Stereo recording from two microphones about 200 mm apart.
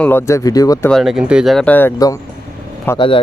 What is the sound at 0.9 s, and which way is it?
Speech, centre (ahead or behind).